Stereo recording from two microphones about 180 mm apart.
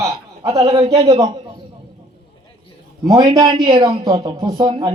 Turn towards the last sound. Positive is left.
turn(degrees=-25)  # may be behind; listen again after turning